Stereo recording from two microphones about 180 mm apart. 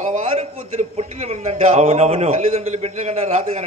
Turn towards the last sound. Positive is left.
turn(degrees=-35)  # may be behind; listen again after turning